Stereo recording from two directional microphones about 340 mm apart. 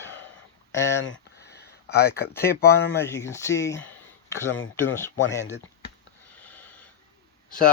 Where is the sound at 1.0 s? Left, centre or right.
Left.